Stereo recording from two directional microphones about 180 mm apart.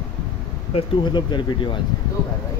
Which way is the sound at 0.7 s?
25° left (ahead or behind).